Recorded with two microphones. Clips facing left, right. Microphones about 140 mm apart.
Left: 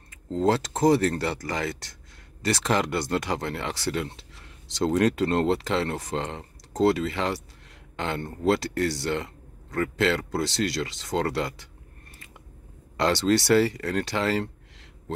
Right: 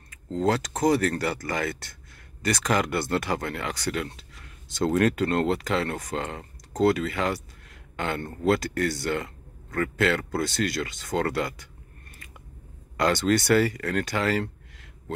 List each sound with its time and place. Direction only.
0.4 s speech: 25° left (ahead or behind)
12.9 s speech: 25° left (ahead or behind)